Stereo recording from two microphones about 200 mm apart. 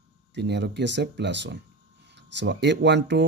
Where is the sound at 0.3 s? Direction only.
60° right (ahead or behind).